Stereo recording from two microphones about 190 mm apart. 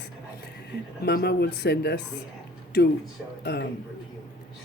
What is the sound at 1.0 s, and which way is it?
Speech, 60° left (ahead or behind).